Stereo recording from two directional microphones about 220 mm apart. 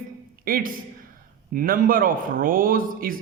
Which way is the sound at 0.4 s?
40° right (ahead or behind).